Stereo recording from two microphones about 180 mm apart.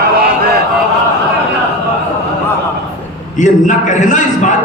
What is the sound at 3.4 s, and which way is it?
A man's voice, 45° left (ahead or behind).